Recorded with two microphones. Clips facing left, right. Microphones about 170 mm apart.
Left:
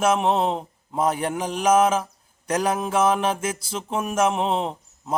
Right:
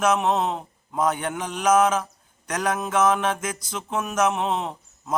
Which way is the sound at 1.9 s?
30° left (ahead or behind).